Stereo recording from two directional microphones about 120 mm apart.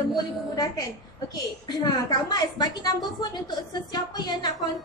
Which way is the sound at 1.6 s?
35° left (ahead or behind).